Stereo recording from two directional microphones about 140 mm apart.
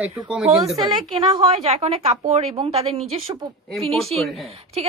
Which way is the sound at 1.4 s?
45° right (ahead or behind).